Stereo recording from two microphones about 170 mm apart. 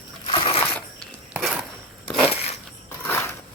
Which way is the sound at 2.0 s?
5° right (ahead or behind).